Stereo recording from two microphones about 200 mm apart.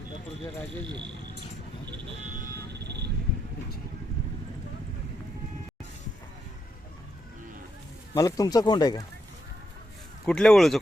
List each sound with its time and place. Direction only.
8.1 s speech: 20° left (ahead or behind)
10.2 s speech: 5° left (ahead or behind)